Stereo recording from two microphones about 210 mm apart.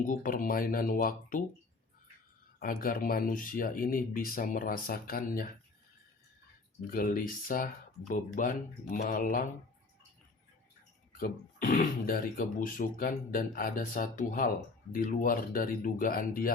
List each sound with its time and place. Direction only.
0.0 s speech: 40° left (ahead or behind)
2.6 s speech: 45° left (ahead or behind)
6.9 s speech: 40° left (ahead or behind)
11.2 s speech: 40° left (ahead or behind)